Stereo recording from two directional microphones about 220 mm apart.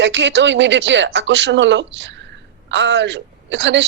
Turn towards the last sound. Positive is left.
turn(degrees=-55)  # may be behind; listen again after turning